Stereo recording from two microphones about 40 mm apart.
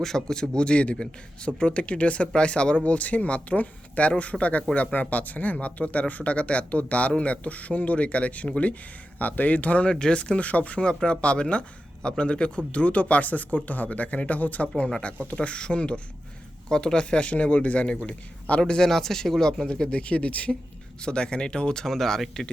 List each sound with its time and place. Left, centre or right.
0.0 s a man's voice: centre; by 8.7 s left
9.1 s speech: left
9.9 s speech: centre
10.2 s a man's voice: left
15.4 s a man's voice: left
18.6 s speech: centre
19.9 s speech: left
21.0 s a man's voice: left
21.8 s speech: centre